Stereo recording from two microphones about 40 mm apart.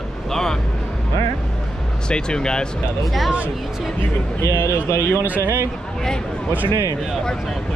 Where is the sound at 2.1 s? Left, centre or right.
Left.